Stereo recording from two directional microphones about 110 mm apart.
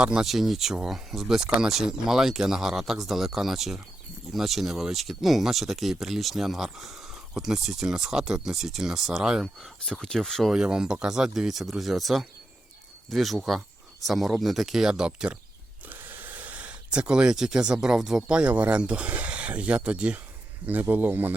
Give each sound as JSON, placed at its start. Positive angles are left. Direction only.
{"t": 0.0, "sound": "speech", "side_deg": -5}
{"t": 9.8, "sound": "speech", "side_deg": 5}